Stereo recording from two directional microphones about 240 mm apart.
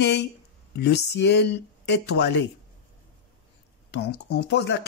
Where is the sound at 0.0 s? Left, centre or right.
Left.